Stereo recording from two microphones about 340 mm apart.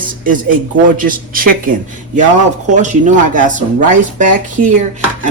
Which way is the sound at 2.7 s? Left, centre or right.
Right.